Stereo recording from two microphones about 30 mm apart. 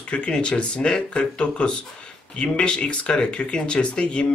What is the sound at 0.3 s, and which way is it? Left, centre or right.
Speech, left.